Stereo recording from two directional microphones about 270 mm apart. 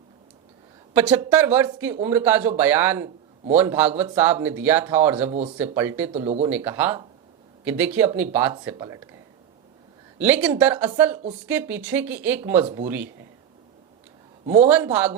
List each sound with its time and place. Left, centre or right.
0.9 s speech: centre
5.3 s speech: right
5.7 s speech: centre
6.1 s speech: right
6.5 s speech: centre
10.2 s speech: centre
14.7 s speech: centre